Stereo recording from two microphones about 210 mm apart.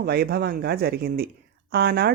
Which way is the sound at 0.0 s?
45° right (ahead or behind).